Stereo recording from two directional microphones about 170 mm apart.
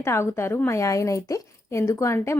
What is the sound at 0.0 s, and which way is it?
Speech, 15° left (ahead or behind).